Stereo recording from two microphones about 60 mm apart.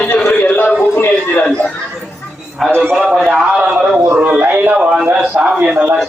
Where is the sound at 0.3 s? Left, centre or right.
Left.